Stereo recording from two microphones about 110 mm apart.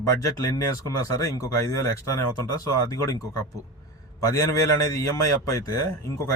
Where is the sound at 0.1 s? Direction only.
30° left (ahead or behind).